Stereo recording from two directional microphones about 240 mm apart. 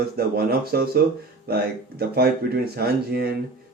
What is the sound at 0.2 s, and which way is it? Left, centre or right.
Speech, right.